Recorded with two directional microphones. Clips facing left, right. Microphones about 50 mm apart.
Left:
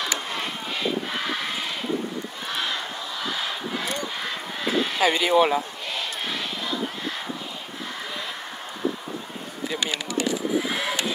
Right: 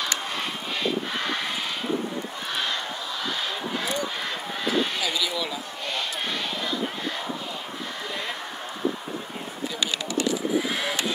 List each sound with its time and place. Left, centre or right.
0.1 s a sound: centre
2.5 s crowd: centre
4.2 s vehicle: centre
5.0 s speech: left
9.8 s a sound: left
10.7 s vehicle: centre